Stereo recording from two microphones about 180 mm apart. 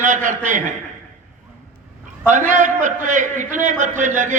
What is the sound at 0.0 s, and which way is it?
Speech, 45° right (ahead or behind).